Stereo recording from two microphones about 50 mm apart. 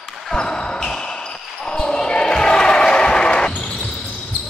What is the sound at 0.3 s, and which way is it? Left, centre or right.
Basketball bounce, centre.